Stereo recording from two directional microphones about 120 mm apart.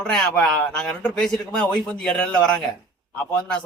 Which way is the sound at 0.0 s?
5° left (ahead or behind).